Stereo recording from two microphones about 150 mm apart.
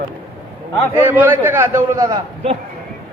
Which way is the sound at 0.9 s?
10° right (ahead or behind).